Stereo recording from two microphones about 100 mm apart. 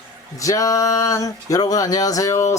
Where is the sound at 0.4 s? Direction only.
35° left (ahead or behind).